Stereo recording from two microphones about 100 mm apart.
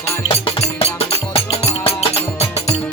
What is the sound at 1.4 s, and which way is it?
Music, 90° left.